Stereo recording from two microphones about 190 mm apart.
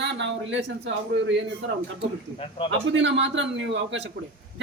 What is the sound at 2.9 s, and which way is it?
A man's voice, 80° right.